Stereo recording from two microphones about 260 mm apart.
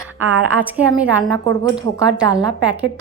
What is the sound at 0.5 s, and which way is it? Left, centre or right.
Speech, centre.